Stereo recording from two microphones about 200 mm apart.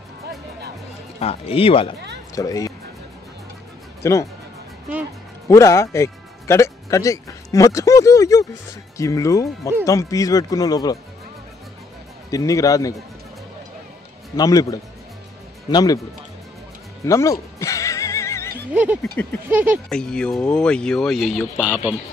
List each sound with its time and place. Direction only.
1.2 s speech: 30° left (ahead or behind)
4.0 s speech: 15° left (ahead or behind)
5.5 s speech: 15° left (ahead or behind)
12.3 s speech: 15° left (ahead or behind)
14.3 s speech: 20° left (ahead or behind)
17.0 s music: 15° left (ahead or behind)
18.7 s speech: 5° right (ahead or behind)
19.9 s speech: 5° left (ahead or behind)